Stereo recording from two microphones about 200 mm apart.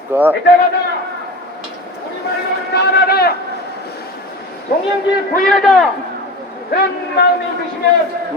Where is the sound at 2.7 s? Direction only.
55° left (ahead or behind).